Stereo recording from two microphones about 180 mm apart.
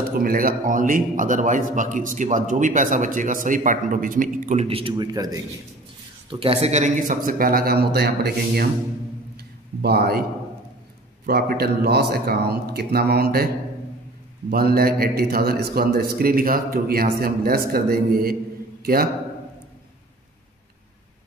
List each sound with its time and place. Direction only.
0.2 s a man's voice: 50° right (ahead or behind); by 5.4 s 20° right (ahead or behind)
6.3 s a man's voice: 30° right (ahead or behind); by 8.6 s 60° right (ahead or behind)
9.8 s a man's voice: 60° right (ahead or behind)
11.2 s a man's voice: 60° right (ahead or behind)
14.5 s a man's voice: 55° right (ahead or behind)